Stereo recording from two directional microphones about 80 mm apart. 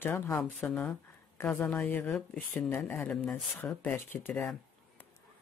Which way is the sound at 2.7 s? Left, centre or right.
Left.